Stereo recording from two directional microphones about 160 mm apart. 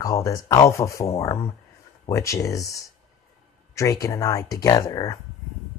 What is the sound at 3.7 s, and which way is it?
Speech, 20° left (ahead or behind).